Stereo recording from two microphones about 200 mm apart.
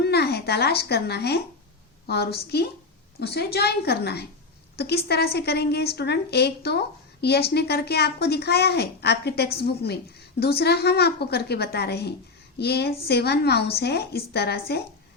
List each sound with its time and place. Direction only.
0.0 s a woman's voice: 55° left (ahead or behind)